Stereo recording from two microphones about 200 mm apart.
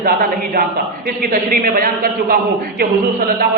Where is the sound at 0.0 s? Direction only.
45° right (ahead or behind).